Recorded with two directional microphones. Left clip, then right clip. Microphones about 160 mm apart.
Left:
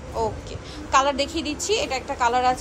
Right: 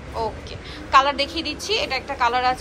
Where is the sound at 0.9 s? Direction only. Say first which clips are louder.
Right 3 dB; 20° left (ahead or behind).